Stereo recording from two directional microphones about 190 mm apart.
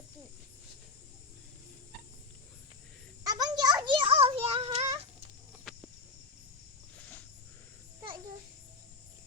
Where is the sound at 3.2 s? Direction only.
20° right (ahead or behind).